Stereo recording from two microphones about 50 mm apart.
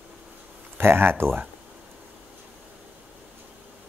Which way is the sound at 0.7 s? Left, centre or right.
Right.